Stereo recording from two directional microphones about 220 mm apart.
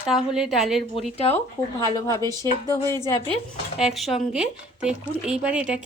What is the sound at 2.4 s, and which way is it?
Speech, 15° left (ahead or behind).